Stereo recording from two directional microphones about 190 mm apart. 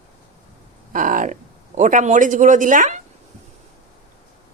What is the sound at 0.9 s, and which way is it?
Speech, 45° right (ahead or behind).